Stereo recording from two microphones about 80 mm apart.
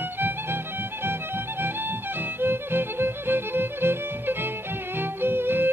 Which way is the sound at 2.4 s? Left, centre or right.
Right.